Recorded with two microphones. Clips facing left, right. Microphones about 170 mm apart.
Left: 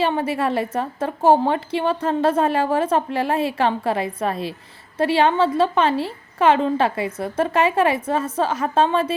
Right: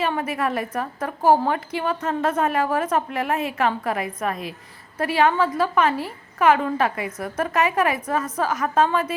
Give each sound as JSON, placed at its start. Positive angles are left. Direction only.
{"t": 0.0, "sound": "a woman's voice", "side_deg": 30}